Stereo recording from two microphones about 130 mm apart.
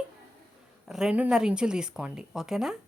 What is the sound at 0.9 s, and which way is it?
Speech, 5° right (ahead or behind).